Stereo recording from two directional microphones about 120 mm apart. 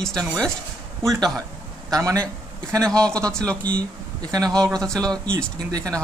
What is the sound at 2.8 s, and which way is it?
Speech, 5° left (ahead or behind).